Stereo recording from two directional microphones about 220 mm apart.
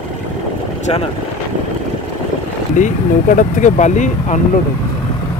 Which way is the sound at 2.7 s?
35° left (ahead or behind).